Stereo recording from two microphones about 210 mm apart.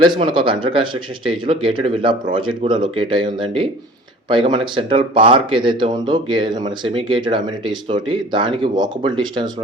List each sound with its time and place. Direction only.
0.0 s speech: 20° right (ahead or behind)